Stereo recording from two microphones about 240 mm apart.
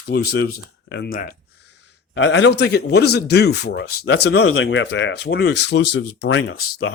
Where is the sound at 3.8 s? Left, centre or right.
Left.